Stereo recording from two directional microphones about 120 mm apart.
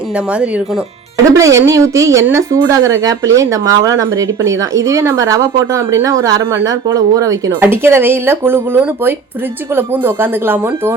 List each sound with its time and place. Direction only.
1.3 s a woman's voice: 25° right (ahead or behind)